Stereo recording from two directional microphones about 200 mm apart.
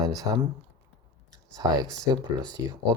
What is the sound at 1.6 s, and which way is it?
Speech, 20° right (ahead or behind).